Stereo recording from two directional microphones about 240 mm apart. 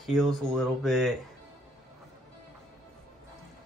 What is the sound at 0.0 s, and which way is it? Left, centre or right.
Speech, centre.